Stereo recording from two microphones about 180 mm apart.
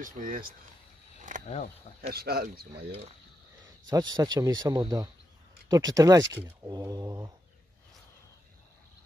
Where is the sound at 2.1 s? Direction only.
60° right (ahead or behind).